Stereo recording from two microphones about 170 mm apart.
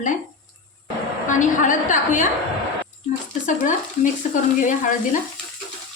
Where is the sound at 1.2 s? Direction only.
50° left (ahead or behind).